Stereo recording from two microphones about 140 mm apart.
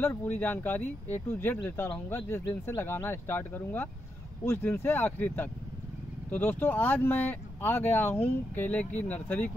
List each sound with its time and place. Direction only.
0.0 s speech: 15° left (ahead or behind)